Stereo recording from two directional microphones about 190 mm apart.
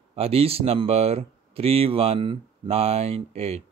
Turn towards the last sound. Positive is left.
turn(degrees=-35)  # may be behind; listen again after turning